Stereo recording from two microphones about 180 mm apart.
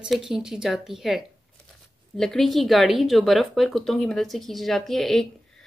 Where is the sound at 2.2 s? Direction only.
5° left (ahead or behind).